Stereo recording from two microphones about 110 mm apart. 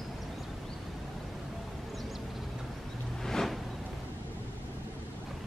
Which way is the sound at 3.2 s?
5° left (ahead or behind).